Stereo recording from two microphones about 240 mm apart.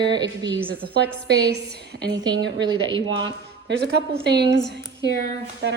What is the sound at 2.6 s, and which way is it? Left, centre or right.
Speech, centre.